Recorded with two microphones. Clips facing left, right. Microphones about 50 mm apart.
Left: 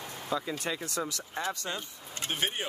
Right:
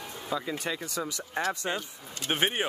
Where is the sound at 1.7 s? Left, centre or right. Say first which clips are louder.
Right 4 dB; right.